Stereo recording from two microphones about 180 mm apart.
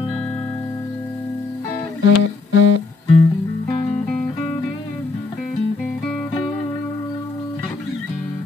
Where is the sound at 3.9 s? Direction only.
5° left (ahead or behind).